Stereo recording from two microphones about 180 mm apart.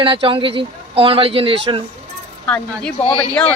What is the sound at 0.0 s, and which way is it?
Speech, 30° right (ahead or behind).